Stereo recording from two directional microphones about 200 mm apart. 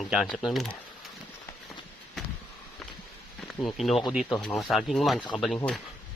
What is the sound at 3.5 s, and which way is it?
Speech, 5° left (ahead or behind).